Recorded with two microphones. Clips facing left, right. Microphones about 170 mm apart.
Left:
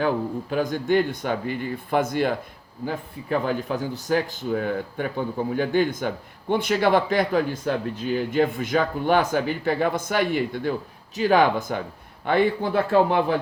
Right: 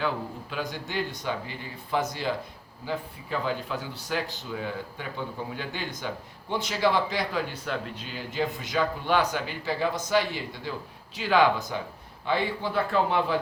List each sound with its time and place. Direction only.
0.5 s speech: 50° left (ahead or behind)